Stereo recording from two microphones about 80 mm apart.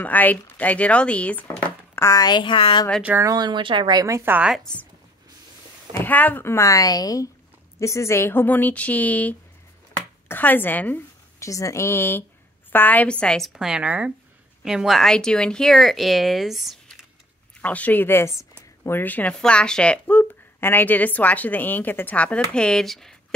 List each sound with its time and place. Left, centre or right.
0.0 s speech: left
2.1 s a woman's voice: left
3.3 s speech: right
4.2 s a woman's voice: right
5.9 s speech: left
7.8 s speech: left
11.3 s speech: left; by 13.4 s centre
13.4 s a woman's voice: centre
14.6 s speech: centre
17.6 s speech: centre; by 18.5 s left
18.9 s speech: left
19.4 s speech: centre